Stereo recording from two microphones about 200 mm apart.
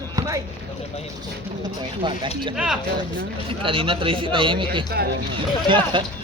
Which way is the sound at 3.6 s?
25° right (ahead or behind).